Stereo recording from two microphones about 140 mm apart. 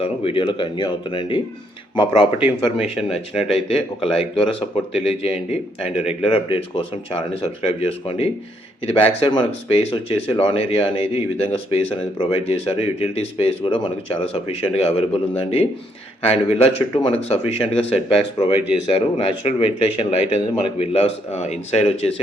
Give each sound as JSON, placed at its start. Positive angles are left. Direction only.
{"t": 0.0, "sound": "speech", "side_deg": 40}
{"t": 2.7, "sound": "speech", "side_deg": 45}